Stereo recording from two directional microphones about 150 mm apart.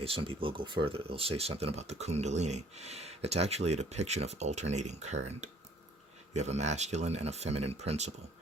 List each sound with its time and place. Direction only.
0.0 s speech: 35° right (ahead or behind)